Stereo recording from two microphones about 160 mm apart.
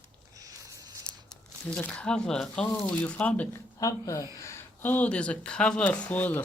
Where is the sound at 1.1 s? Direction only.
5° left (ahead or behind).